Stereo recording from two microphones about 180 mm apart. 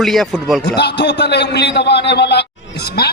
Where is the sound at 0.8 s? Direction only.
70° left (ahead or behind).